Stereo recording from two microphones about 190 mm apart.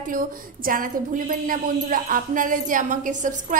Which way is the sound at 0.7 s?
45° right (ahead or behind).